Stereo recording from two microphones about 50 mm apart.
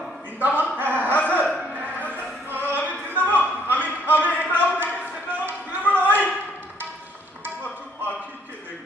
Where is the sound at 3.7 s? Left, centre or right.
Left.